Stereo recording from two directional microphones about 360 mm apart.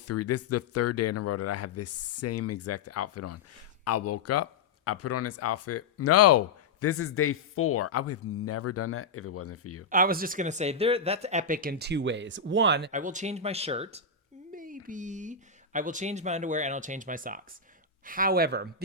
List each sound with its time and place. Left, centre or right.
0.0 s speech: left
9.9 s speech: right